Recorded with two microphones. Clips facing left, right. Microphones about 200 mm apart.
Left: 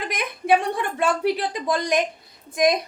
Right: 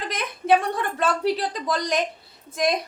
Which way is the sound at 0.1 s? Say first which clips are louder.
Even; 15° left (ahead or behind).